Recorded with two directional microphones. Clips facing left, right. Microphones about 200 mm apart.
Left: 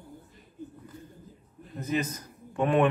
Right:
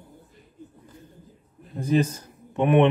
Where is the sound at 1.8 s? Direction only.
30° right (ahead or behind).